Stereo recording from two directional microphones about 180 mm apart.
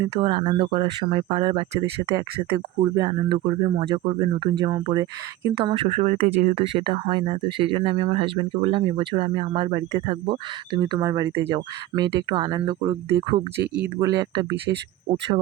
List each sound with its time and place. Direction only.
0.0 s speech: 25° right (ahead or behind)
13.7 s speech: 10° right (ahead or behind)
14.1 s speech: 20° right (ahead or behind)